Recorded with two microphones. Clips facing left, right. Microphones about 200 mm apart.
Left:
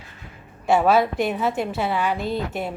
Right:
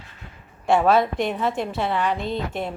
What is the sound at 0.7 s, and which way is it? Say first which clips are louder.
A woman's voice: even; 5° left (ahead or behind).